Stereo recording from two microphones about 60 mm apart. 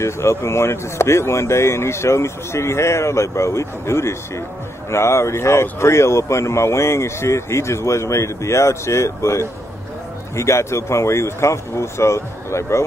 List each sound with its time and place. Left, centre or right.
0.0 s speech: left